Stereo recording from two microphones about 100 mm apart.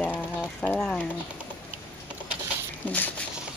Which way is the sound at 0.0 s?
10° left (ahead or behind).